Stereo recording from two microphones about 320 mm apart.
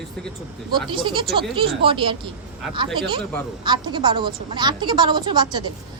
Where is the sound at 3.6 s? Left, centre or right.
Centre.